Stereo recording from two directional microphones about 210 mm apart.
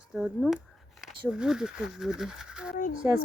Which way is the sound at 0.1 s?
Centre (ahead or behind).